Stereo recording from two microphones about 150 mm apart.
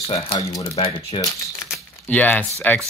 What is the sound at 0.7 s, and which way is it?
Speech, 40° left (ahead or behind).